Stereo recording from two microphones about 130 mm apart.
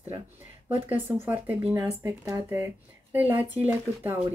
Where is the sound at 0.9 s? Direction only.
15° right (ahead or behind).